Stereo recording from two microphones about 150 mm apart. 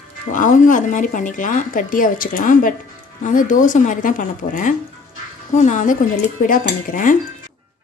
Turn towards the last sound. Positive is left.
turn(degrees=65)  # may be behind; listen again after turning